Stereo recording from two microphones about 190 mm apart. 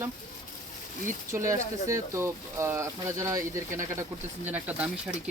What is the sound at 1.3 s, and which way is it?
Speech, 15° right (ahead or behind).